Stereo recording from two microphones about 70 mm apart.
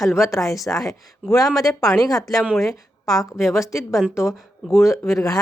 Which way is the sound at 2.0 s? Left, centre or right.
Left.